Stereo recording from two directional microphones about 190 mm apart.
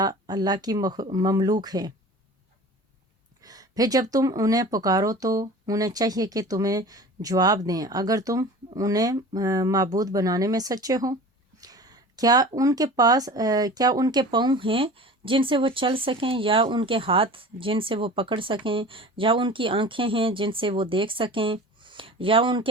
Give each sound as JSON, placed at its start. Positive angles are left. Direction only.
{"t": 0.0, "sound": "speech", "side_deg": -20}
{"t": 3.4, "sound": "speech", "side_deg": -20}